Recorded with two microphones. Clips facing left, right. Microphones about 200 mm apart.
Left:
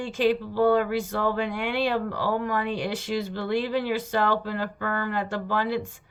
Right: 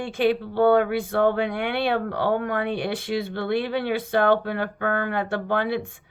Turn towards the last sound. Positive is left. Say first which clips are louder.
# right 2 dB
turn(degrees=-60)  # may be behind; listen again after turning